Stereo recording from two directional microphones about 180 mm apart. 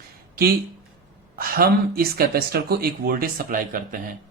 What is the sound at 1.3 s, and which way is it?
Speech, 55° right (ahead or behind).